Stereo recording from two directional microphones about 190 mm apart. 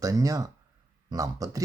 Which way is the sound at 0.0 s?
20° right (ahead or behind).